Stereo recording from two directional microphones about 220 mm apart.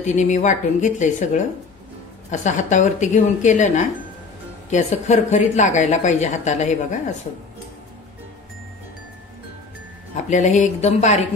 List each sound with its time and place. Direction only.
0.0 s speech: 35° left (ahead or behind)
2.4 s speech: 35° left (ahead or behind)
10.3 s speech: 35° left (ahead or behind)